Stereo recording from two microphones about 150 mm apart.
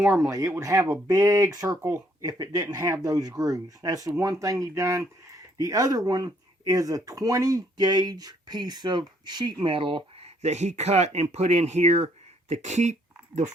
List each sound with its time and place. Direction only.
0.3 s speech: 20° right (ahead or behind); by 13.5 s 50° right (ahead or behind)